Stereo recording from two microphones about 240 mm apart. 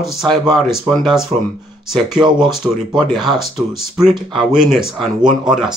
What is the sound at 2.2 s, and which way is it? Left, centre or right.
Speech, centre.